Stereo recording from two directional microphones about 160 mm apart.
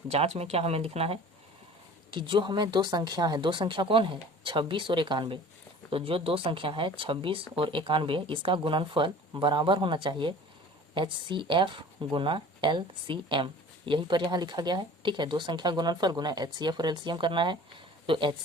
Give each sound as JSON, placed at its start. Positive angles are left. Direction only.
{"t": 0.1, "sound": "speech", "side_deg": -40}